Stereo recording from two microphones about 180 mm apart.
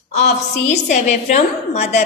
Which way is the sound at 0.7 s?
40° left (ahead or behind).